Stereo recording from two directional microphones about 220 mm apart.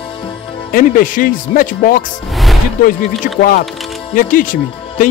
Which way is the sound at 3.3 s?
40° left (ahead or behind).